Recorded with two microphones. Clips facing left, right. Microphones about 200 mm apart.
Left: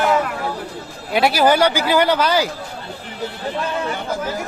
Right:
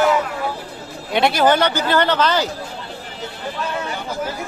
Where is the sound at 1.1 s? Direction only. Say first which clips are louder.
Left 1 dB; 5° left (ahead or behind).